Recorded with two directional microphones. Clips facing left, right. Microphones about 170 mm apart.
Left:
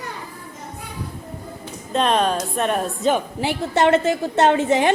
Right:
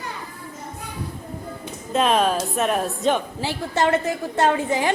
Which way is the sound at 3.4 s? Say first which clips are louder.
Left 3 dB; 20° left (ahead or behind).